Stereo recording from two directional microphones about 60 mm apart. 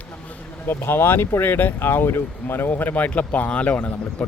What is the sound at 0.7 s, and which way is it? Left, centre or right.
Speech, left.